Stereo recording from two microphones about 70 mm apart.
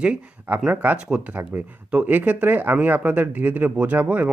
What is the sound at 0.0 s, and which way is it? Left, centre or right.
Speech, centre.